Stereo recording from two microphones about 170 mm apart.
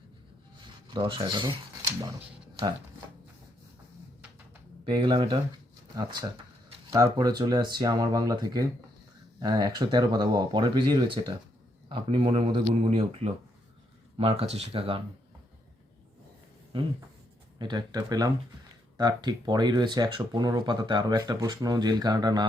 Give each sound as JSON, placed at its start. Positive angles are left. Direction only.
{"t": 0.9, "sound": "speech", "side_deg": -30}
{"t": 4.9, "sound": "speech", "side_deg": -30}
{"t": 17.6, "sound": "speech", "side_deg": -25}